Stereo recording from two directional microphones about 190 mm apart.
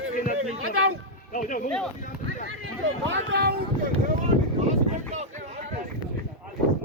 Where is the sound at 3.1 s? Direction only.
65° right (ahead or behind).